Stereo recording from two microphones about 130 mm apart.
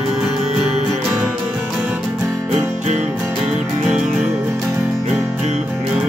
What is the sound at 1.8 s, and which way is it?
Music, 15° right (ahead or behind).